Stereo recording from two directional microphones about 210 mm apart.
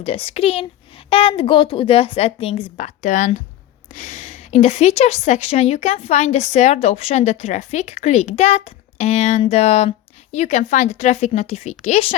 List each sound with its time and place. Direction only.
0.0 s a woman's voice: 25° left (ahead or behind)